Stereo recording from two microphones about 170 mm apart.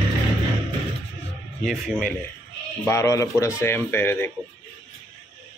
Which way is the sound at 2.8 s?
15° left (ahead or behind).